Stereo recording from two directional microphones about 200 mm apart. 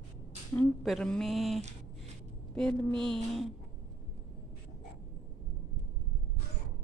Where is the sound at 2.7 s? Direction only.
25° right (ahead or behind).